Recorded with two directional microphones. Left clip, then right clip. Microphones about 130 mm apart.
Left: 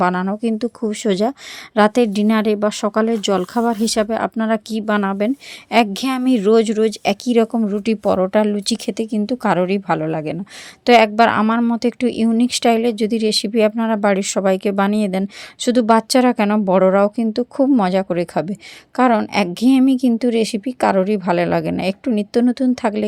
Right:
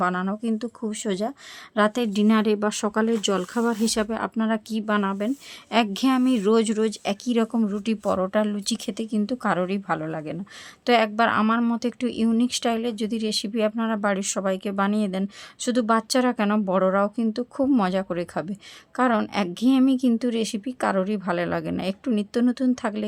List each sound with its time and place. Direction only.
0.0 s speech: 45° left (ahead or behind)